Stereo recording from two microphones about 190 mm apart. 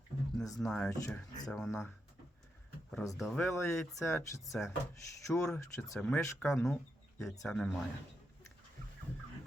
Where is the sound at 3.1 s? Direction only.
Centre (ahead or behind).